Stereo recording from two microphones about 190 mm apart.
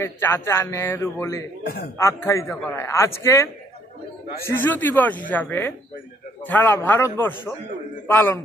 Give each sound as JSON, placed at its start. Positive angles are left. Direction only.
{"t": 0.0, "sound": "a man's voice", "side_deg": 15}
{"t": 1.6, "sound": "a man's voice", "side_deg": 55}
{"t": 2.0, "sound": "a man's voice", "side_deg": 15}
{"t": 4.6, "sound": "a man's voice", "side_deg": 10}